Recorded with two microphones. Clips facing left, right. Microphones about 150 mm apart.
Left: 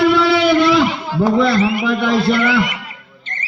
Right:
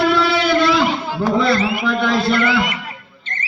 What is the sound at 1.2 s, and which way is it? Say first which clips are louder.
A man's voice: left 4 dB; 15° left (ahead or behind).